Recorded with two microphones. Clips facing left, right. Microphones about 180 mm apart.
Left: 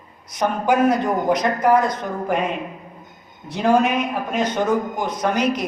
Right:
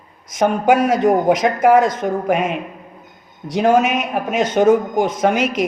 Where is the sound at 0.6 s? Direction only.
90° right.